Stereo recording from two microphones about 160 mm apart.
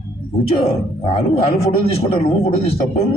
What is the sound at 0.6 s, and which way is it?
A man's voice, 40° left (ahead or behind).